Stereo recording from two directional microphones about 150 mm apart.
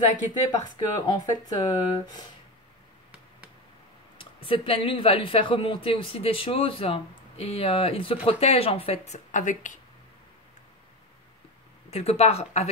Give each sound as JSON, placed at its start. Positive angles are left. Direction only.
{"t": 0.7, "sound": "speech", "side_deg": 25}
{"t": 4.2, "sound": "speech", "side_deg": 35}
{"t": 9.3, "sound": "speech", "side_deg": 55}
{"t": 11.9, "sound": "speech", "side_deg": 45}